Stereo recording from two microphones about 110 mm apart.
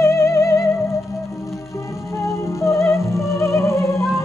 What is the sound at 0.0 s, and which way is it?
Music, 25° left (ahead or behind).